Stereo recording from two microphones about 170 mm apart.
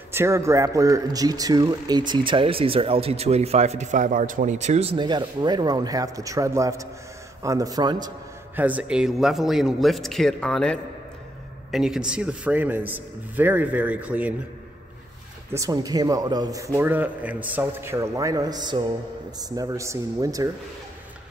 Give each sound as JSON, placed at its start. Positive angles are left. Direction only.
{"t": 0.1, "sound": "speech", "side_deg": -15}
{"t": 8.5, "sound": "a man's voice", "side_deg": -10}
{"t": 15.5, "sound": "speech", "side_deg": -20}